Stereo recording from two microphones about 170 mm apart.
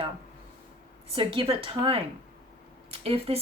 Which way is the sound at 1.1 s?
30° right (ahead or behind).